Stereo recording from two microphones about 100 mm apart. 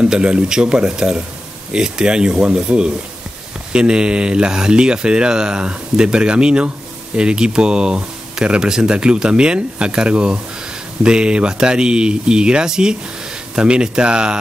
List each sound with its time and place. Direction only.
0.0 s speech: 10° right (ahead or behind)